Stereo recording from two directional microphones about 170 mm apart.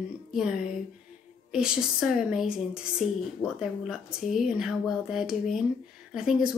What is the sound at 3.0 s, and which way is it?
Speech, 40° left (ahead or behind).